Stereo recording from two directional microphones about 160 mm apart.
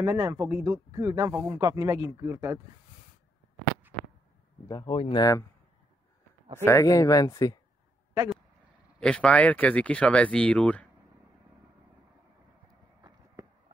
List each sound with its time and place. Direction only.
0.0 s speech: 15° right (ahead or behind)
4.6 s speech: 25° left (ahead or behind)
6.6 s speech: 20° left (ahead or behind)
9.0 s speech: 5° left (ahead or behind)